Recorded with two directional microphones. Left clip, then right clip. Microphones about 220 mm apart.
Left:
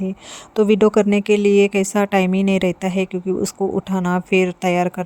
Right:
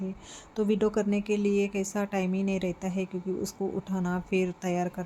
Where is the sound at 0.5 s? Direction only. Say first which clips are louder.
Left 13 dB; 40° left (ahead or behind).